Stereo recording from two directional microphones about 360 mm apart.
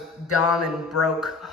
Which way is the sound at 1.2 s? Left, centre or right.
Centre.